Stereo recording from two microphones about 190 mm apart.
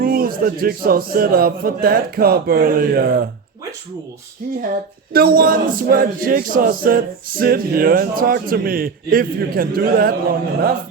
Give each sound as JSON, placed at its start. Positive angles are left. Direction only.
{"t": 0.0, "sound": "a sound", "side_deg": -50}
{"t": 0.6, "sound": "a capella", "side_deg": -50}
{"t": 4.7, "sound": "a capella", "side_deg": -50}